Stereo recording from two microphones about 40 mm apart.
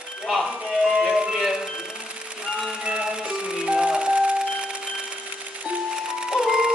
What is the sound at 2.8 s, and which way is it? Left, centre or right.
Music, right.